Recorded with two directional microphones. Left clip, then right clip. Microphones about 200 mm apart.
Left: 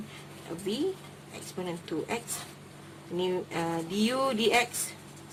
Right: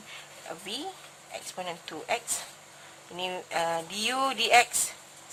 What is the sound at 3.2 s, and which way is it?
Speech, 40° right (ahead or behind).